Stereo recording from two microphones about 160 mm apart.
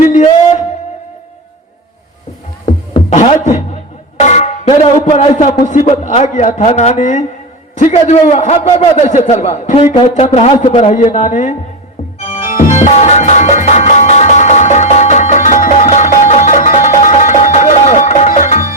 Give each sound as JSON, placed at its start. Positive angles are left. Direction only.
{"t": 3.1, "sound": "speech", "side_deg": 50}
{"t": 4.2, "sound": "music", "side_deg": 45}
{"t": 5.6, "sound": "a man's voice", "side_deg": 50}
{"t": 10.8, "sound": "a man's voice", "side_deg": 50}
{"t": 12.2, "sound": "music", "side_deg": 50}